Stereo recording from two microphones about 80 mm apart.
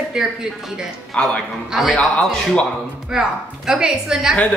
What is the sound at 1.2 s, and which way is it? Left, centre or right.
Speech, centre.